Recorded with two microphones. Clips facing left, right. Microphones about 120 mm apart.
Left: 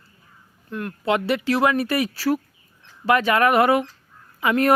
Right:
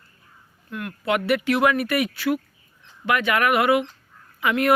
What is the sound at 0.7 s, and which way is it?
Speech, 30° left (ahead or behind).